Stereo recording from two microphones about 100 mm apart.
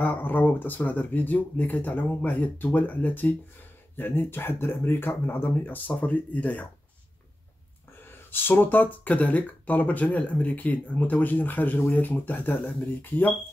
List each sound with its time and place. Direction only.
0.0 s speech: 15° left (ahead or behind)
8.0 s speech: 20° left (ahead or behind)